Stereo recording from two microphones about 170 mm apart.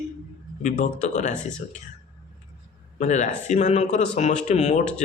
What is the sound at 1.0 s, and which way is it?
Speech, 45° left (ahead or behind).